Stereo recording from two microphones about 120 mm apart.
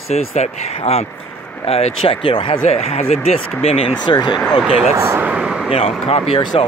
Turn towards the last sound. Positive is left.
turn(degrees=50)  # may be behind; listen again after turning